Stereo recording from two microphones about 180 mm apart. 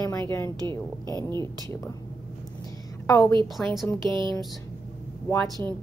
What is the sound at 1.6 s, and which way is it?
Speech, 15° left (ahead or behind).